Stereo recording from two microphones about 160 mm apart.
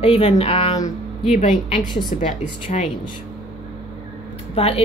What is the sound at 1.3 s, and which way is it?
A woman's voice, 50° left (ahead or behind).